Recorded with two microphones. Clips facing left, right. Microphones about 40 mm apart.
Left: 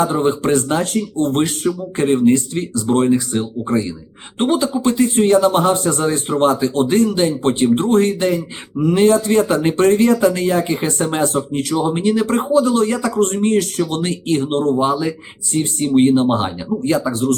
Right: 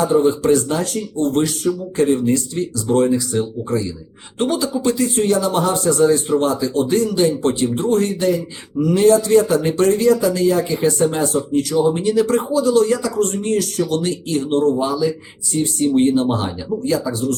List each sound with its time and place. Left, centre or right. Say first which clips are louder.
0.0 s speech: right 1 dB; left